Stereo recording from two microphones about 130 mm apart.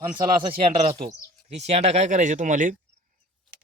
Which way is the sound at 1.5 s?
55° right (ahead or behind).